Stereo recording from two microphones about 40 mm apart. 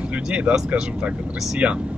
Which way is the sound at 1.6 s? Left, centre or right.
Right.